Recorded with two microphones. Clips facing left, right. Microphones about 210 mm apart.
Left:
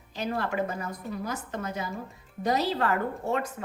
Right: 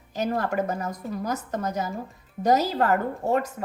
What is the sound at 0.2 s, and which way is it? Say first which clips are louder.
A woman's voice: right 4 dB; 45° right (ahead or behind).